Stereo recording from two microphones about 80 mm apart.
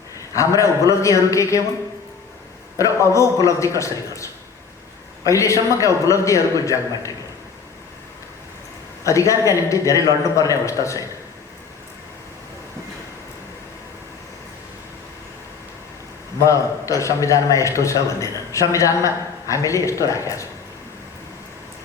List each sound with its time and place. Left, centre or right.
0.3 s a man's voice: left
2.7 s a man's voice: left
9.0 s a man's voice: left
16.4 s a man's voice: left